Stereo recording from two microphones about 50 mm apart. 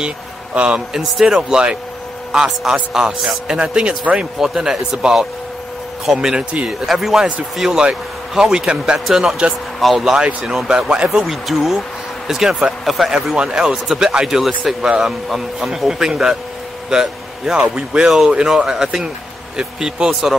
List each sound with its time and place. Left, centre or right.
0.6 s a man's voice: centre
4.4 s a man's voice: centre
9.0 s a man's voice: centre
11.2 s a man's voice: centre
12.8 s speech: centre
13.1 s a man's voice: centre
14.8 s a man's voice: centre
18.0 s a man's voice: centre
20.1 s speech: centre